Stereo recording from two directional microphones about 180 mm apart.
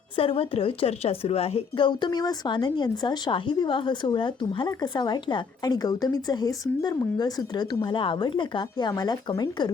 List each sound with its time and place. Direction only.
0.2 s a woman's voice: 30° left (ahead or behind)